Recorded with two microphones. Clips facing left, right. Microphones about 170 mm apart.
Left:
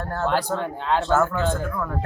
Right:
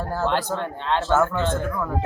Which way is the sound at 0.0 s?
Centre (ahead or behind).